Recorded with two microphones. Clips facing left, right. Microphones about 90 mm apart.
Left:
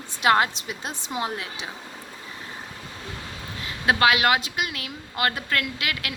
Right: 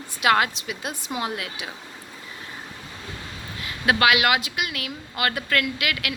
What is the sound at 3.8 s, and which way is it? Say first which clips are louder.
A woman's voice: even; 35° left (ahead or behind).